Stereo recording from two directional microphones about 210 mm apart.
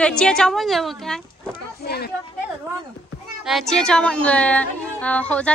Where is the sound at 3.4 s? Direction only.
Centre (ahead or behind).